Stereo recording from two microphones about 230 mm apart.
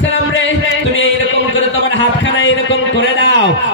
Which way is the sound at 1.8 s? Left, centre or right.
Left.